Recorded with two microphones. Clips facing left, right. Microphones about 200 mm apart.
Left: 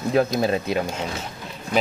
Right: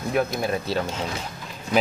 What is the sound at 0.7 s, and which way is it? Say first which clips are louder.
Speech: left 2 dB; 10° left (ahead or behind).